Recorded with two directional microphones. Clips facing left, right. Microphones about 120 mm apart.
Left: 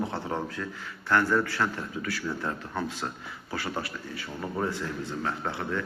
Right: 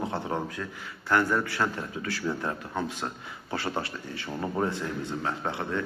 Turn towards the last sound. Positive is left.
turn(degrees=-20)  # may be behind; listen again after turning